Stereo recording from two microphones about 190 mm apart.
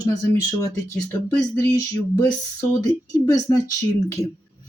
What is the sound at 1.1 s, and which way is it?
Speech, 15° left (ahead or behind).